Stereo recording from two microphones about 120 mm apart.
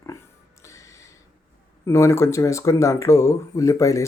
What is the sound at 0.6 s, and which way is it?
Music, 25° left (ahead or behind).